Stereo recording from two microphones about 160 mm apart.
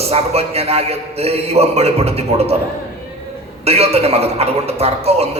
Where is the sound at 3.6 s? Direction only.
40° right (ahead or behind).